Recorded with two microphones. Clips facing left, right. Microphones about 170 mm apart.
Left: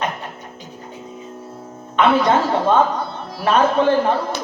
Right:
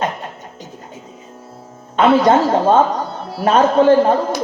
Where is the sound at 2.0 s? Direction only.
40° right (ahead or behind).